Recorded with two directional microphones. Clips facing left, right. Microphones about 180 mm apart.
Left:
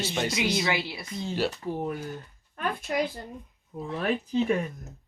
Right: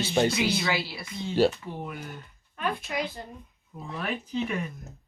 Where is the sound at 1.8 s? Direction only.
45° left (ahead or behind).